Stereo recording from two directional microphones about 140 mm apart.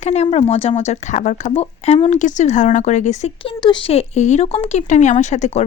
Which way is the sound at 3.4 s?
35° left (ahead or behind).